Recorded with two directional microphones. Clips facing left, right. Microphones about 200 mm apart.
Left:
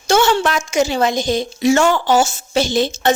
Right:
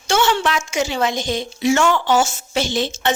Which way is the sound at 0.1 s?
40° left (ahead or behind).